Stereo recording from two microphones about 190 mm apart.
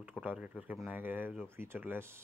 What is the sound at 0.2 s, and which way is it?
Speech, 10° right (ahead or behind).